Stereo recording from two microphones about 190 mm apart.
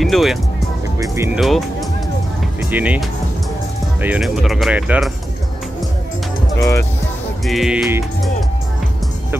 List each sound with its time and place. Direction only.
0.0 s music: centre (ahead or behind)
0.9 s speech: 15° right (ahead or behind)
1.4 s speech: centre (ahead or behind)
6.6 s speech: 15° left (ahead or behind)
7.4 s speech: centre (ahead or behind)